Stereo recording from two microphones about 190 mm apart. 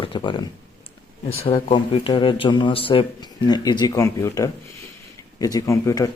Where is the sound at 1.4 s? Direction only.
30° left (ahead or behind).